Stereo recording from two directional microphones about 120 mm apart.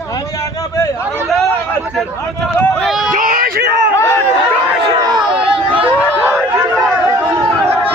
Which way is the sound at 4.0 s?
20° left (ahead or behind).